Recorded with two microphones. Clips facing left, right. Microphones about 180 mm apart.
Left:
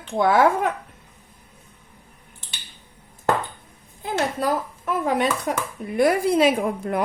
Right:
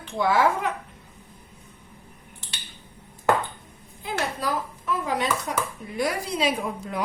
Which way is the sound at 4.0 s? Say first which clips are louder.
Left 5 dB; 50° left (ahead or behind).